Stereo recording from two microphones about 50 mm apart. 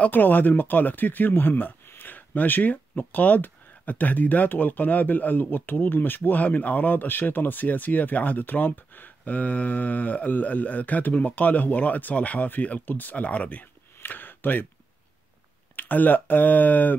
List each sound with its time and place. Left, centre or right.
0.1 s speech: left
14.0 s a sound: left
15.7 s speech: left